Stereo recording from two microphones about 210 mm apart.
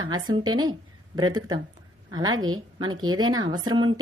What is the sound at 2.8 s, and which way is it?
Speech, 20° right (ahead or behind).